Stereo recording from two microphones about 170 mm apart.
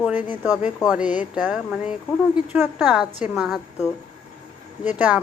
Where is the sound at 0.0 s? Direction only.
10° right (ahead or behind).